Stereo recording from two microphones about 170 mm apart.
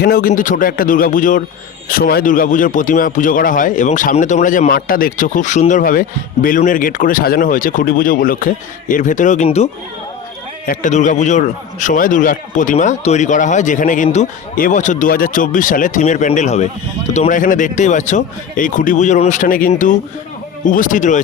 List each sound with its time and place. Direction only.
0.0 s speech: 60° left (ahead or behind)
1.9 s speech: 60° left (ahead or behind); by 9.6 s 40° left (ahead or behind)
10.7 s speech: 45° left (ahead or behind)